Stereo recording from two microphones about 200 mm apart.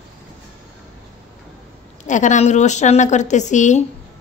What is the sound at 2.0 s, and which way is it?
Speech, 40° left (ahead or behind).